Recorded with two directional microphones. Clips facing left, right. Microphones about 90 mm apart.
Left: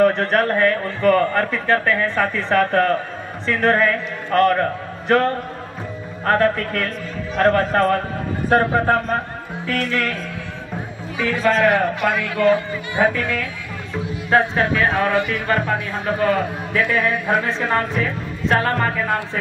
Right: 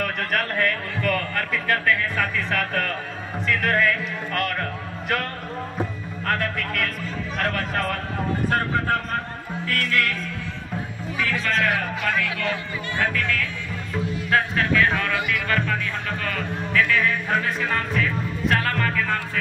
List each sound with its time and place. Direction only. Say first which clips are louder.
0.0 s a man's voice: left 10 dB; 30° left (ahead or behind)
9.7 s music: left 3 dB; 25° left (ahead or behind)
11.3 s a man's voice: left 9 dB; 40° left (ahead or behind)
12.9 s a man's voice: left 6 dB; 15° left (ahead or behind); by 15.4 s 40° left (ahead or behind)
16.2 s music: left 9 dB; 30° left (ahead or behind)